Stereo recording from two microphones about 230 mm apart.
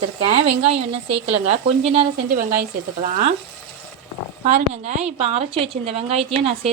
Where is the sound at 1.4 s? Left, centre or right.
Right.